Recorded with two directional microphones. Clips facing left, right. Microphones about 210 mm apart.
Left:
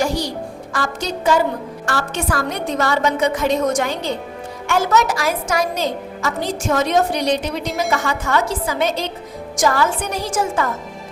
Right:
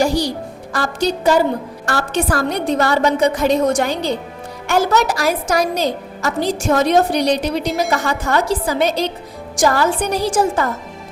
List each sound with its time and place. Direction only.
0.0 s music: 35° right (ahead or behind)
0.7 s a woman's voice: 35° right (ahead or behind)